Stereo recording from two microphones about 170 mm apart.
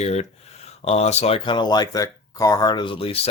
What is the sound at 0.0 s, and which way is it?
Speech, 40° left (ahead or behind).